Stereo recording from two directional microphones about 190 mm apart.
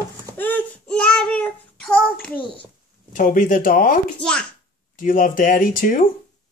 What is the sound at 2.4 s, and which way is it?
Speech, 25° left (ahead or behind).